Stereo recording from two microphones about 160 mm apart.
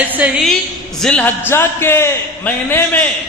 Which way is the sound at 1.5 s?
15° left (ahead or behind).